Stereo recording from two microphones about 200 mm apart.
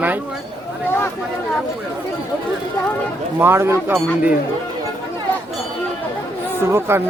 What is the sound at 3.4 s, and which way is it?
Speech, 10° right (ahead or behind).